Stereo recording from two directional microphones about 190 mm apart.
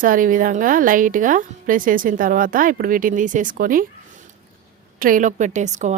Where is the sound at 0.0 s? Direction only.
45° right (ahead or behind).